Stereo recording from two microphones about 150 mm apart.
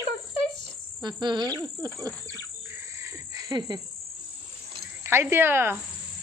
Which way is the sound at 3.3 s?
30° right (ahead or behind).